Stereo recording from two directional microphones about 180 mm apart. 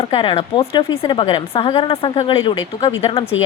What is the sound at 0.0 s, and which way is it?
Speech, 30° left (ahead or behind).